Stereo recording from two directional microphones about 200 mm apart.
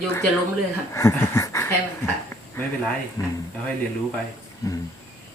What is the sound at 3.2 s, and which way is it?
Speech, 20° left (ahead or behind).